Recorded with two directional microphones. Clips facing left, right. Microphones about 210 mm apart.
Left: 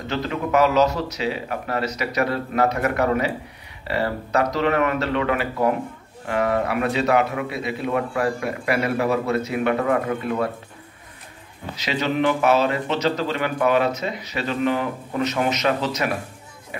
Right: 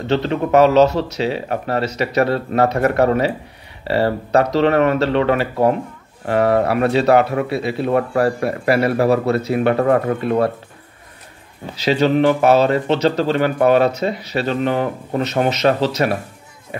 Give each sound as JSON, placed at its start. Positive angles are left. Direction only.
{"t": 0.0, "sound": "speech", "side_deg": -30}
{"t": 11.7, "sound": "speech", "side_deg": -30}